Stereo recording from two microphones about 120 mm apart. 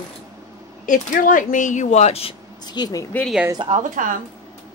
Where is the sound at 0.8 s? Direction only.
90° left; by 2.3 s 60° left (ahead or behind).